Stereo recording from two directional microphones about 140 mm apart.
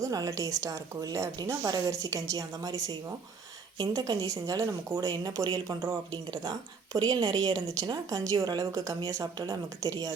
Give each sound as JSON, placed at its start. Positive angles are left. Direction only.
{"t": 0.0, "sound": "a woman's voice", "side_deg": -25}